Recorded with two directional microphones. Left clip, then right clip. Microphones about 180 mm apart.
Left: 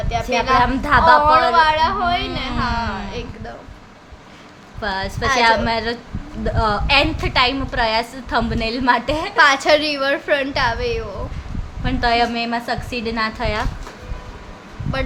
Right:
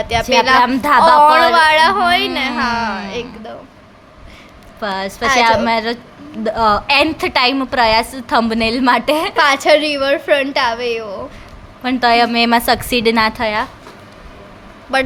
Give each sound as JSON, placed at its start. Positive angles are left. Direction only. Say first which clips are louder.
{"t": 0.1, "sound": "a woman's voice", "louder": "right 6 dB", "side_deg": -65}
{"t": 0.6, "sound": "a woman's voice", "louder": "right 4 dB", "side_deg": -20}
{"t": 1.0, "sound": "a woman's voice", "louder": "right 4 dB", "side_deg": -55}
{"t": 4.8, "sound": "a woman's voice", "louder": "right 3 dB", "side_deg": -20}
{"t": 12.3, "sound": "a woman's voice", "louder": "right 9 dB", "side_deg": -60}
{"t": 13.4, "sound": "speech", "louder": "right 5 dB", "side_deg": -10}